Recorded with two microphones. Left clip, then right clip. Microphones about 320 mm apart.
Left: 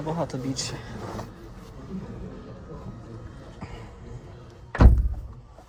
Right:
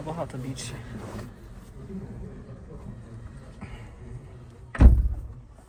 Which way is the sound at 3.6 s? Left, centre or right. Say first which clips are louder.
Left 3 dB; centre.